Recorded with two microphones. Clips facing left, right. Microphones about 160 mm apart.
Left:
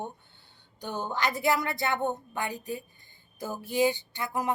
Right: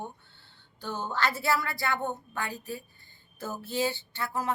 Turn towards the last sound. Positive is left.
turn(degrees=15)  # may be behind; listen again after turning